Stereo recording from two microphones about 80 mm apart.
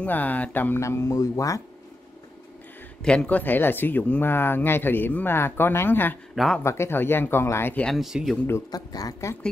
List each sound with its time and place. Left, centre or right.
0.0 s speech: left
0.7 s speech: left
3.0 s speech: centre
6.3 s a man's voice: centre
6.6 s speech: left
7.8 s speech: centre
8.7 s speech: left